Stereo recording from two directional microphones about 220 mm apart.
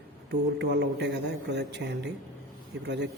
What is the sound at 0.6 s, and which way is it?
A man's voice, 50° right (ahead or behind).